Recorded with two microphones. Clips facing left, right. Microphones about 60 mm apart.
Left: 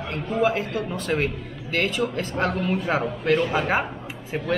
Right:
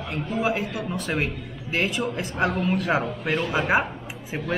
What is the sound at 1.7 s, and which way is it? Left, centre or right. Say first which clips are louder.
Speech: left 1 dB; centre.